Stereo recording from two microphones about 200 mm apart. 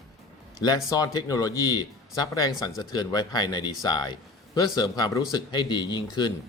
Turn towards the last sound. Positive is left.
turn(degrees=20)  # may be behind; listen again after turning